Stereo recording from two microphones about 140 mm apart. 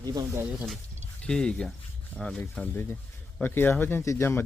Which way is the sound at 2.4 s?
15° left (ahead or behind).